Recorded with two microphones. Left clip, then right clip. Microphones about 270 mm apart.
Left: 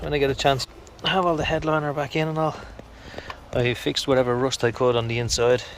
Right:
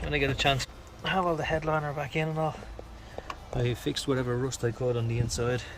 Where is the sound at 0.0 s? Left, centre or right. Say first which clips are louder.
Left 6 dB; left.